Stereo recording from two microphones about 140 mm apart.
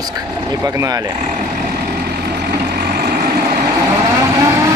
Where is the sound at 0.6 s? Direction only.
25° right (ahead or behind).